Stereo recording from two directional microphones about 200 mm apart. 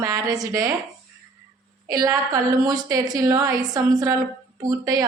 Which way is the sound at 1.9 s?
15° right (ahead or behind).